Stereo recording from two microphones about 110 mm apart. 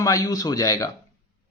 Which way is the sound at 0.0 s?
30° left (ahead or behind).